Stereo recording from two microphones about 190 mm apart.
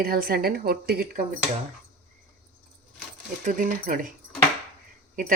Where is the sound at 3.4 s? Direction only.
40° right (ahead or behind).